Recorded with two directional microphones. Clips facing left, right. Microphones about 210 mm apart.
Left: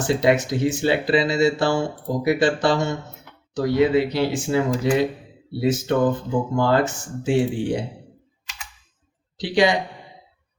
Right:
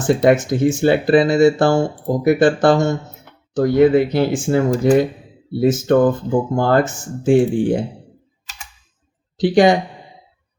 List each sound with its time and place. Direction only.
0.1 s speech: 50° right (ahead or behind)
9.4 s speech: 45° right (ahead or behind)